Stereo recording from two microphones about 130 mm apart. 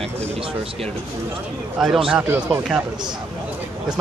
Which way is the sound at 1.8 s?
5° right (ahead or behind).